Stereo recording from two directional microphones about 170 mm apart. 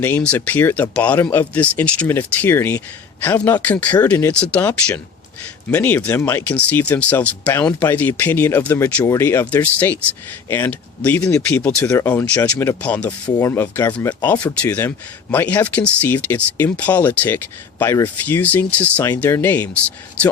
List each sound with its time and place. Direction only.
0.0 s speech: 10° left (ahead or behind)
13.2 s speech: 25° left (ahead or behind)
13.5 s speech: 10° left (ahead or behind)